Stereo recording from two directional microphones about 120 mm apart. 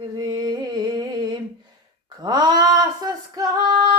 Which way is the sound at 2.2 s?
35° right (ahead or behind).